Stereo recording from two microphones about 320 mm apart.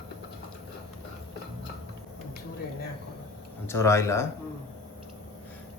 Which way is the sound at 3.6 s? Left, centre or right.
Centre.